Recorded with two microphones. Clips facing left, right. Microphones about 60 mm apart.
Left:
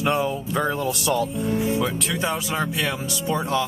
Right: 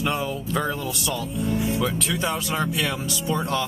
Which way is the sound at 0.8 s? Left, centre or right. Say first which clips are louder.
Left 5 dB; left.